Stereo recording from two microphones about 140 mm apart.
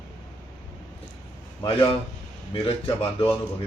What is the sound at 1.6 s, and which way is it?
A man's voice, 35° left (ahead or behind).